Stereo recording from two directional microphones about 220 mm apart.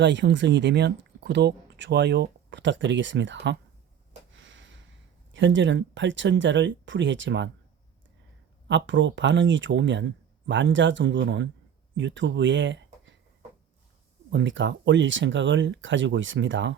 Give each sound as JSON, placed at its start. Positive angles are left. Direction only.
{"t": 0.0, "sound": "speech", "side_deg": -55}
{"t": 4.3, "sound": "a sound", "side_deg": -60}
{"t": 5.3, "sound": "speech", "side_deg": -55}
{"t": 8.6, "sound": "speech", "side_deg": -55}
{"t": 14.3, "sound": "speech", "side_deg": -55}